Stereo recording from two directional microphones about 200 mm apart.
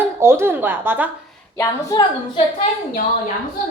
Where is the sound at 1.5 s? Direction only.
15° left (ahead or behind).